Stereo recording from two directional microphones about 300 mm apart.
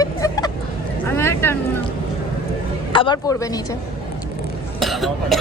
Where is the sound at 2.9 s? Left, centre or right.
Centre.